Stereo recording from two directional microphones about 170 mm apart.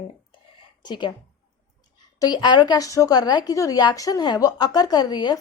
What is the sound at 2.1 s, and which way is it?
A woman's voice, 25° left (ahead or behind).